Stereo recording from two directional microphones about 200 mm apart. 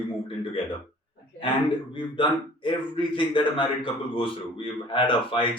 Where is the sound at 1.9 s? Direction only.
25° left (ahead or behind).